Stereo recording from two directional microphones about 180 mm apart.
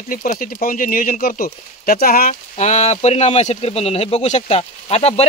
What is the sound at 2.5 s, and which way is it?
Speech, 40° left (ahead or behind).